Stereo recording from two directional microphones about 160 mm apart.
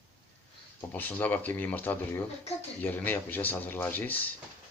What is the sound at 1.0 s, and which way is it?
Speech, 10° left (ahead or behind).